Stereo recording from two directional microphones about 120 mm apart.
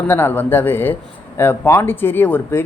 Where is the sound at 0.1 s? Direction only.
20° left (ahead or behind).